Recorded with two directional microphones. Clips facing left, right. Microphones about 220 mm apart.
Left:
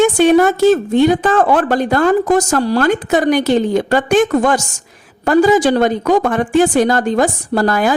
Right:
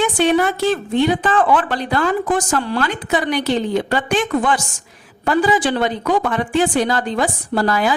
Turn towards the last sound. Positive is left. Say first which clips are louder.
# left 4 dB
turn(degrees=45)  # may be behind; listen again after turning